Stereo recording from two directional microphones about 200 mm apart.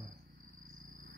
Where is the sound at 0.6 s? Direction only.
45° right (ahead or behind).